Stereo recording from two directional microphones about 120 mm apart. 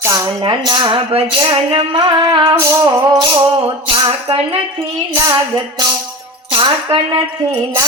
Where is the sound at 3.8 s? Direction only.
50° right (ahead or behind).